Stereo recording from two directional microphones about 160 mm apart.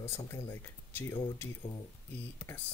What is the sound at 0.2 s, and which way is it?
Speech, 15° left (ahead or behind).